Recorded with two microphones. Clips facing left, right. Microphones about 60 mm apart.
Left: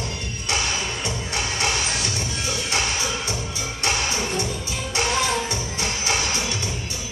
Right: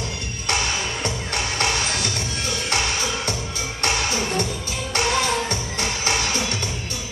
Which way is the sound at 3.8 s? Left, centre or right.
Right.